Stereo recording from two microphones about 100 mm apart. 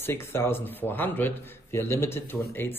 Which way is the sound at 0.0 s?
25° left (ahead or behind).